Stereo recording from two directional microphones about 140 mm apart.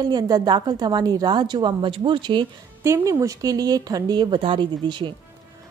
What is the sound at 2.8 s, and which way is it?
A woman's voice, 20° right (ahead or behind).